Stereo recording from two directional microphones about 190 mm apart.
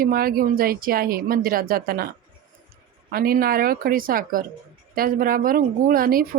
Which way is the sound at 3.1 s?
50° right (ahead or behind).